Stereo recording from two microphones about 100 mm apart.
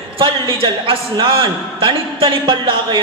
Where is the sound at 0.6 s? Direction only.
65° right (ahead or behind).